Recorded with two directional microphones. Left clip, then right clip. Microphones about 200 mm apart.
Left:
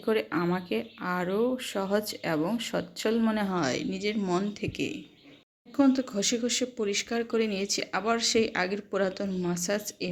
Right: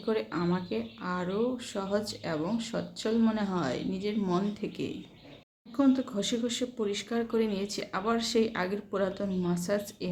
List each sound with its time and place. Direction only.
0.0 s speech: 30° left (ahead or behind)